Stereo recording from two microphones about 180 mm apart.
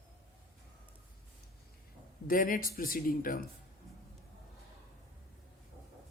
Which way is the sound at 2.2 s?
50° left (ahead or behind).